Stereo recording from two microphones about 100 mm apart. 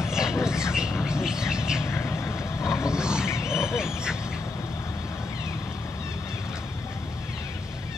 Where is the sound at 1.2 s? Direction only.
5° right (ahead or behind).